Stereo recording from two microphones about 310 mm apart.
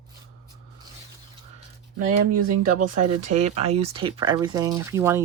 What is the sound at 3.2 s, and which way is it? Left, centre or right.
Speech, right.